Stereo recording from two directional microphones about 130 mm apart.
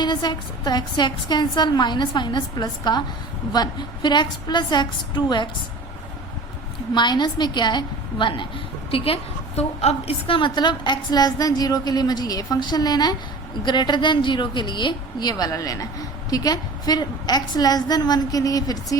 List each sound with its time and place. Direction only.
0.0 s a woman's voice: 35° left (ahead or behind)
6.9 s a woman's voice: 35° left (ahead or behind)